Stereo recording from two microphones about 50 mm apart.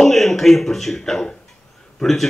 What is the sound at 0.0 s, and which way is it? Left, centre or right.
Speech, centre.